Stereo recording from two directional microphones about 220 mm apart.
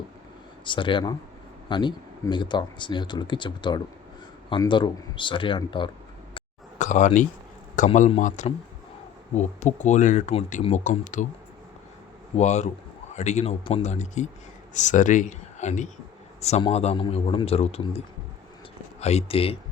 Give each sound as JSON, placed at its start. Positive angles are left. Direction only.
{"t": 0.6, "sound": "speech", "side_deg": 20}
{"t": 6.3, "sound": "a sound", "side_deg": 35}
{"t": 7.8, "sound": "speech", "side_deg": 35}
{"t": 12.4, "sound": "speech", "side_deg": 30}